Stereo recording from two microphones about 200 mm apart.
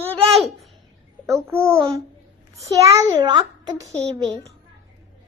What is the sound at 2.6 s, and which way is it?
A child's voice, 15° right (ahead or behind).